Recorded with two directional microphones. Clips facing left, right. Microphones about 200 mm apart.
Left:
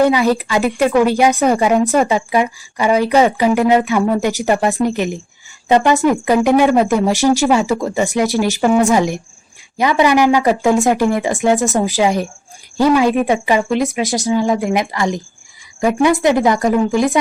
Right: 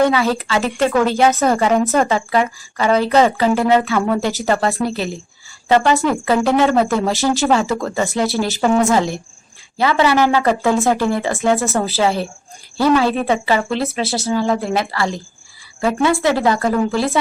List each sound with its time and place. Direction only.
0.0 s a woman's voice: 15° left (ahead or behind)